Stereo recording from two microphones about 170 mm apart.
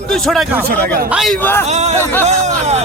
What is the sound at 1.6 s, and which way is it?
Speech, 40° right (ahead or behind).